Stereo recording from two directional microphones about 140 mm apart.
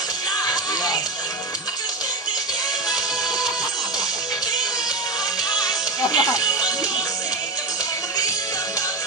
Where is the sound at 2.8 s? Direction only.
30° left (ahead or behind).